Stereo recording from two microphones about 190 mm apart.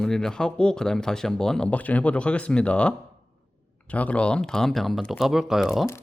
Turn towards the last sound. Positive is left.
turn(degrees=0)  # may be behind; listen again after turning